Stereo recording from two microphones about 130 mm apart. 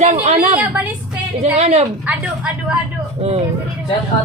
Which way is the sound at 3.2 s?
55° right (ahead or behind).